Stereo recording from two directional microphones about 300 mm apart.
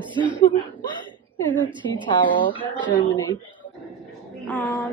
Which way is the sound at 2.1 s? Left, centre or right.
Centre.